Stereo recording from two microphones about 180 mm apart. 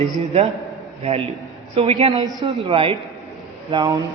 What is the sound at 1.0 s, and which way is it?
A woman's voice, 35° right (ahead or behind).